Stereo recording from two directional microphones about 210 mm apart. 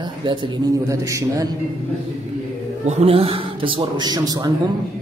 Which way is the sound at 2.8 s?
30° right (ahead or behind).